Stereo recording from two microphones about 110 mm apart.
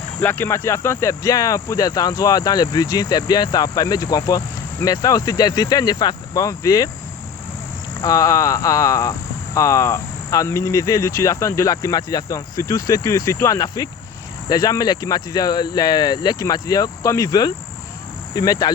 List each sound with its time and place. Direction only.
0.2 s speech: 20° left (ahead or behind)
8.0 s cricket: 30° left (ahead or behind)
14.5 s speech: 35° left (ahead or behind)